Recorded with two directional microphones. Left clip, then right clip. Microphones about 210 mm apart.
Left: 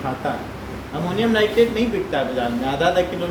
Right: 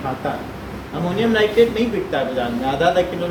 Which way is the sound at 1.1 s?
15° left (ahead or behind).